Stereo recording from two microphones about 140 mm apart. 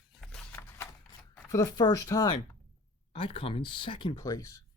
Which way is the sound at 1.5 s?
25° left (ahead or behind).